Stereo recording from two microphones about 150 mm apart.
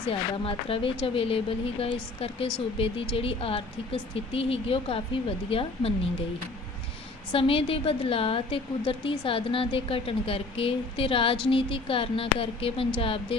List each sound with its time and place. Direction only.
0.1 s speech: 40° left (ahead or behind)
7.3 s speech: 40° left (ahead or behind)